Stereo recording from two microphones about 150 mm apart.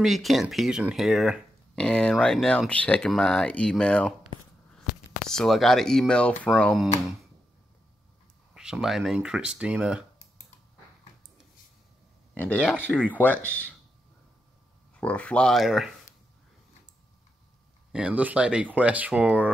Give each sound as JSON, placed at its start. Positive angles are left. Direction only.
{"t": 0.0, "sound": "speech", "side_deg": 0}
{"t": 5.2, "sound": "speech", "side_deg": 5}
{"t": 8.5, "sound": "speech", "side_deg": -5}
{"t": 12.4, "sound": "speech", "side_deg": 10}
{"t": 15.0, "sound": "speech", "side_deg": 10}
{"t": 17.9, "sound": "speech", "side_deg": -10}